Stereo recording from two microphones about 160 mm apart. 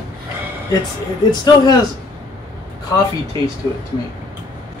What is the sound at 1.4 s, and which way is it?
Speech, 25° left (ahead or behind).